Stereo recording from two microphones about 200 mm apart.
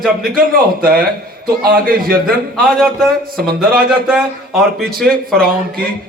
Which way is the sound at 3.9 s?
5° right (ahead or behind).